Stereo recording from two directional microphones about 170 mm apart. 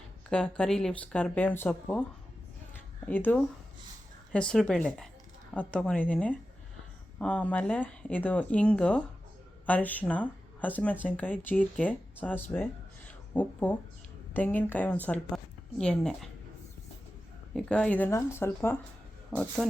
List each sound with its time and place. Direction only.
0.3 s speech: 5° left (ahead or behind)
3.1 s a woman's voice: 10° left (ahead or behind)
13.1 s a sound: 10° left (ahead or behind)
14.3 s a woman's voice: 10° left (ahead or behind)
17.5 s speech: 5° left (ahead or behind)